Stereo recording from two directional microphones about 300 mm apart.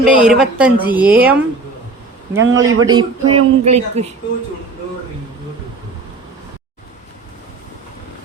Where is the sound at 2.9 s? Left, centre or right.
Centre.